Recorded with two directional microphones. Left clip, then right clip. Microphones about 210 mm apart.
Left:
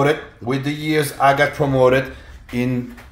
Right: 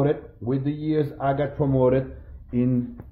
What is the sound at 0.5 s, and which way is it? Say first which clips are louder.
Speech: left 5 dB; 35° left (ahead or behind).